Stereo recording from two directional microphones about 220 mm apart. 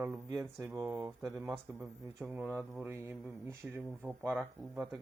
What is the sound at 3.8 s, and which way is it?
Speech, centre (ahead or behind).